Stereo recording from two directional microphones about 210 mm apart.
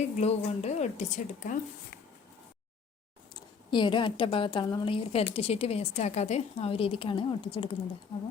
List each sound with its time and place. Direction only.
0.0 s a woman's voice: 30° left (ahead or behind)
3.7 s a woman's voice: 20° left (ahead or behind)